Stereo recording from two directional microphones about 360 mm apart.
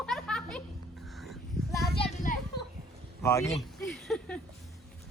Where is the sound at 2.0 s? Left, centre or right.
Centre.